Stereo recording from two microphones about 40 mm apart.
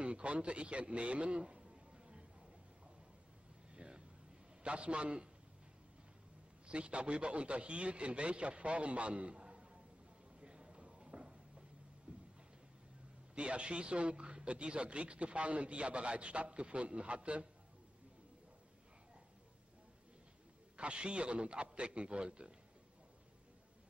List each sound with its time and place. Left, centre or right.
0.0 s a man's voice: right
3.7 s vehicle: right
4.6 s a man's voice: right
6.7 s a man's voice: right
10.4 s a sound: right
13.3 s a man's voice: right
20.7 s a man's voice: right